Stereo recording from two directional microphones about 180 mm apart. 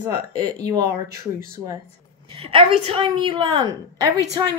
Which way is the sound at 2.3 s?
30° right (ahead or behind).